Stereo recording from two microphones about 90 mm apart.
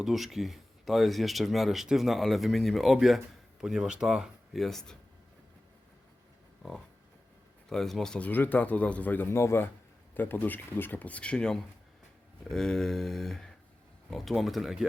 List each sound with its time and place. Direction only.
0.0 s speech: 5° right (ahead or behind)
6.6 s a sound: 5° left (ahead or behind)
7.7 s speech: 5° left (ahead or behind)
8.3 s speech: 20° left (ahead or behind); by 14.8 s centre (ahead or behind)